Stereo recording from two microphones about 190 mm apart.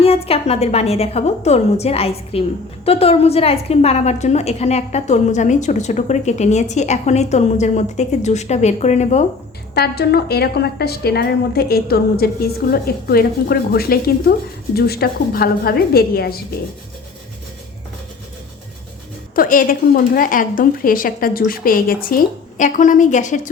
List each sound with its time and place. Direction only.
0.0 s a woman's voice: 30° left (ahead or behind)
9.7 s a woman's voice: 55° left (ahead or behind)
19.4 s a woman's voice: 45° left (ahead or behind)